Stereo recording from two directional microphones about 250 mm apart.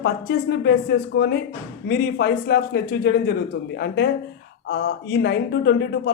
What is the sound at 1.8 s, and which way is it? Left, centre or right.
Speech, left.